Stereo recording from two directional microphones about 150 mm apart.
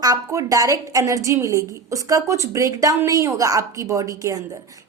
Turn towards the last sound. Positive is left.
turn(degrees=-25)  # may be behind; listen again after turning